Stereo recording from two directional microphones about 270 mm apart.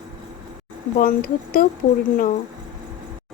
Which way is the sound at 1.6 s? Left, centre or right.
Left.